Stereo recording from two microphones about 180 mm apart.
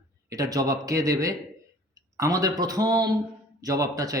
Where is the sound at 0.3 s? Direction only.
20° right (ahead or behind).